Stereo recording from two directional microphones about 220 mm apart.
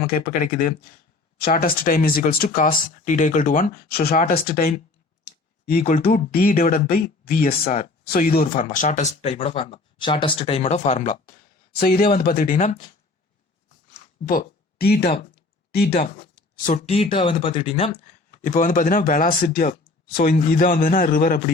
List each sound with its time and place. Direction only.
0.0 s speech: 45° left (ahead or behind)
5.2 s clicking: 40° left (ahead or behind)
6.0 s speech: 40° left (ahead or behind)
13.9 s a sound: 40° left (ahead or behind)
15.7 s speech: 45° left (ahead or behind)